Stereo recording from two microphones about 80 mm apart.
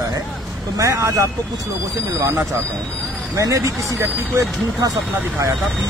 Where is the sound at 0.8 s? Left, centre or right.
Right.